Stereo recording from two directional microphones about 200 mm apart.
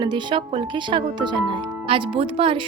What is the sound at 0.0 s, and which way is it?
Speech, 25° right (ahead or behind).